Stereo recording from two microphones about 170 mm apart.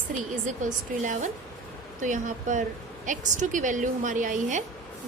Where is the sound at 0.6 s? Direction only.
45° right (ahead or behind).